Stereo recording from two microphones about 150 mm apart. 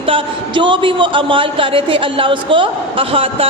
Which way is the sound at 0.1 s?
35° right (ahead or behind).